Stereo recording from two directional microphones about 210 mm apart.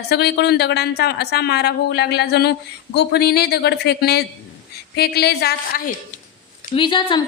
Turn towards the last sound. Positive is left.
turn(degrees=25)  # may be behind; listen again after turning